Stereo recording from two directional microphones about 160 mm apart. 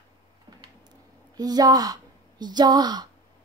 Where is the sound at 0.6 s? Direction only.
25° right (ahead or behind).